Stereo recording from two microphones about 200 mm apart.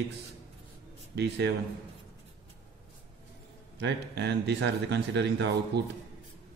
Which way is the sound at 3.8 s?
60° right (ahead or behind).